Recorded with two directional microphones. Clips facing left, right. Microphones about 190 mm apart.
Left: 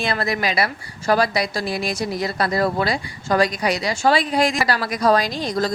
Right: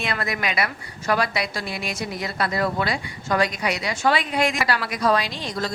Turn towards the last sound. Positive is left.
turn(degrees=40)  # may be behind; listen again after turning